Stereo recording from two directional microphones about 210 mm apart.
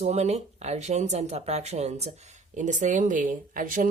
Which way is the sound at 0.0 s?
30° right (ahead or behind).